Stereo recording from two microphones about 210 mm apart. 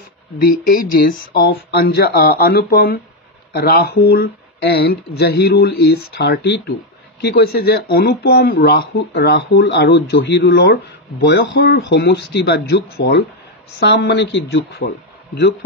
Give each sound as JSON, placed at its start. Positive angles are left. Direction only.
{"t": 0.4, "sound": "speech", "side_deg": 45}